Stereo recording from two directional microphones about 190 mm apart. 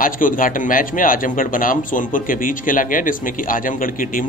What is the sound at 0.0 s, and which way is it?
A man's voice, 45° left (ahead or behind).